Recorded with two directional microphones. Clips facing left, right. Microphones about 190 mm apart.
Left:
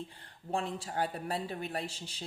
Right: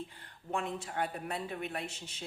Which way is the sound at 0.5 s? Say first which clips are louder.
Left 1 dB; 35° left (ahead or behind).